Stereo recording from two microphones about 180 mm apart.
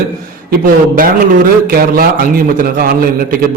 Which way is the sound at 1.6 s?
55° right (ahead or behind).